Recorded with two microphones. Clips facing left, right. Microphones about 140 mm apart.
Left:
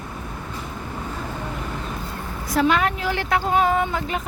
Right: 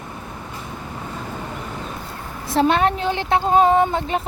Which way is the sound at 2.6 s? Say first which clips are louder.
Right 3 dB; 30° right (ahead or behind).